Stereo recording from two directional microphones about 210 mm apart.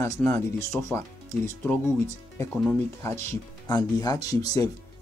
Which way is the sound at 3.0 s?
15° left (ahead or behind).